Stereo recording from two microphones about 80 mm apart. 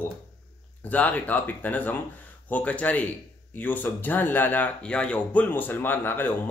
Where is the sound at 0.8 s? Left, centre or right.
Centre.